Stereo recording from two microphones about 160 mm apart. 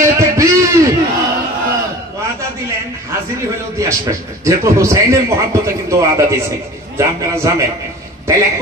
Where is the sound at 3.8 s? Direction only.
20° right (ahead or behind).